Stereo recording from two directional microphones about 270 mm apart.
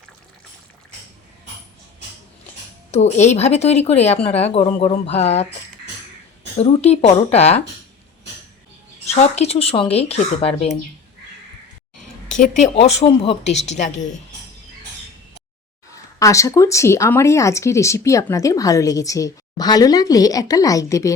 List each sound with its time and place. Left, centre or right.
2.9 s speech: left
6.6 s speech: left
9.0 s speech: left
12.4 s speech: left
16.1 s speech: centre